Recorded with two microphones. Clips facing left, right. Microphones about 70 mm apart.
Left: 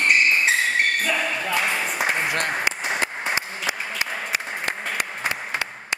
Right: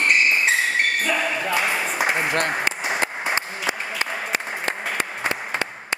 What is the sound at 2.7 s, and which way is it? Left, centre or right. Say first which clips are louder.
Applause: right 1 dB; centre.